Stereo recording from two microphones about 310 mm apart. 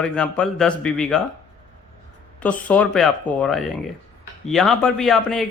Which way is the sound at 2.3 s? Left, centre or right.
Centre.